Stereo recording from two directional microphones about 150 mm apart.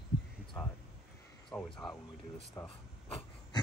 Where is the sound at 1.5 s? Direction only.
20° left (ahead or behind).